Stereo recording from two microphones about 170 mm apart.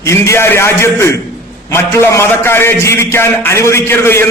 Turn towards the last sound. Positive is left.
turn(degrees=15)  # may be behind; listen again after turning